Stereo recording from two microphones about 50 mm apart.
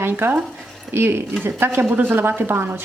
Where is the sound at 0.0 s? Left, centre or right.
Right.